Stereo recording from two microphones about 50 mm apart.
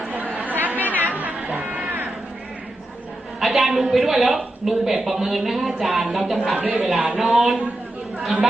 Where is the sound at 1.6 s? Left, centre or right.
Right.